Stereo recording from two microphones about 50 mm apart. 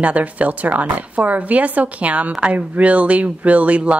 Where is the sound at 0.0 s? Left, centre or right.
Right.